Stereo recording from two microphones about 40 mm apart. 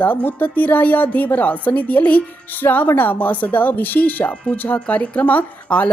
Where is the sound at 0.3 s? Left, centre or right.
Left.